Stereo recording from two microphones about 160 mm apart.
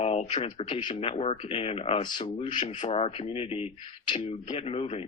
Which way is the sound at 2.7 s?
45° left (ahead or behind).